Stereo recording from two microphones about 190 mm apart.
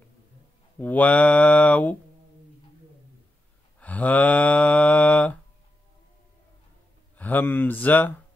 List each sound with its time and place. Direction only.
0.7 s speech: 10° left (ahead or behind)
3.8 s mantra: 10° left (ahead or behind)
7.2 s a sound: 10° left (ahead or behind)